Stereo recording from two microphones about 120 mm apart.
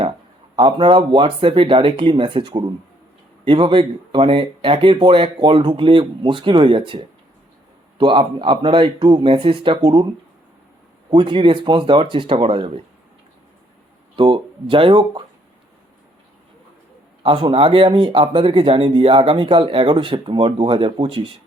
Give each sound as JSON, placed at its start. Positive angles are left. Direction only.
{"t": 0.5, "sound": "speech", "side_deg": -45}
{"t": 11.1, "sound": "speech", "side_deg": -45}
{"t": 14.2, "sound": "speech", "side_deg": -45}
{"t": 17.2, "sound": "speech", "side_deg": -50}